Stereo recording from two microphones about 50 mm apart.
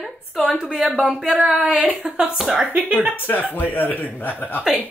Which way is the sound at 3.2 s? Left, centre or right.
Left.